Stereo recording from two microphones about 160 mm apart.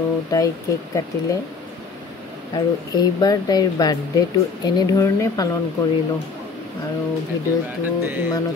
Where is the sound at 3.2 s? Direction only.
25° left (ahead or behind).